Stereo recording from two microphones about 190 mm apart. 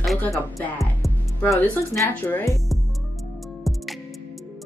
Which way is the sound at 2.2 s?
15° left (ahead or behind).